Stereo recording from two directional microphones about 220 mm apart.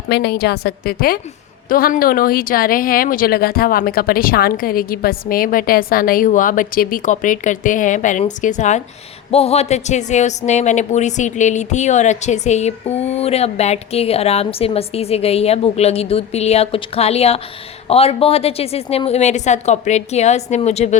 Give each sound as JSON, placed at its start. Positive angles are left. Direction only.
{"t": 0.1, "sound": "a woman's voice", "side_deg": 45}